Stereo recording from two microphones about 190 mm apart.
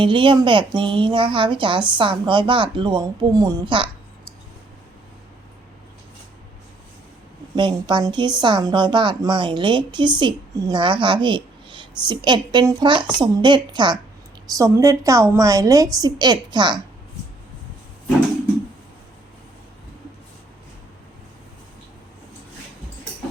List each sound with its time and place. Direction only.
0.0 s a woman's voice: 25° right (ahead or behind)
7.5 s a woman's voice: 25° right (ahead or behind)